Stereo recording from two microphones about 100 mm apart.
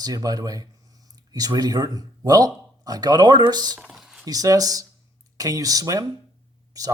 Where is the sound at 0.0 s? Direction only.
35° right (ahead or behind).